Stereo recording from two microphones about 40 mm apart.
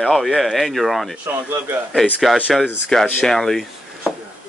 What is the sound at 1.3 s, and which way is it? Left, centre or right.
Speech, right.